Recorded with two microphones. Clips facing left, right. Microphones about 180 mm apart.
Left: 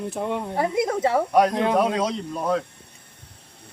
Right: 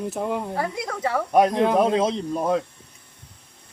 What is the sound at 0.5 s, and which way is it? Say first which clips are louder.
Speech: left 5 dB; 25° left (ahead or behind).